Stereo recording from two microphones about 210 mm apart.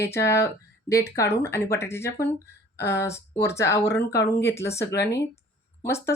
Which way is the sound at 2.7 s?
55° left (ahead or behind).